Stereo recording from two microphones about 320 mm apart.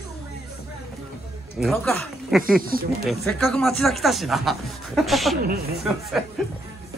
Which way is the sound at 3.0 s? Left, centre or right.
Centre.